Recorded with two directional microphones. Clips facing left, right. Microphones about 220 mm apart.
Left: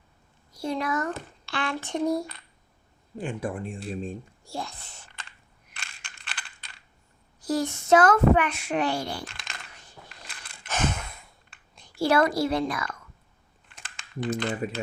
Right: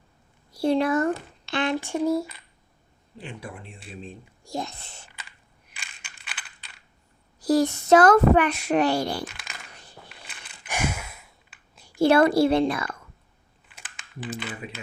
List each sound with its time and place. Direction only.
0.5 s a woman's voice: 30° right (ahead or behind)
1.5 s a sound: 20° right (ahead or behind)
1.7 s a sound: 10° right (ahead or behind)
3.2 s speech: 50° left (ahead or behind)
4.4 s a woman's voice: 20° right (ahead or behind)
5.7 s coin: 5° right (ahead or behind)
7.3 s a child's voice: 35° right (ahead or behind)
9.2 s coin: centre (ahead or behind)
9.7 s biting: 35° right (ahead or behind)
10.1 s a sound: 5° right (ahead or behind)
11.9 s a woman's voice: 25° right (ahead or behind)
13.7 s crumpling: 5° right (ahead or behind)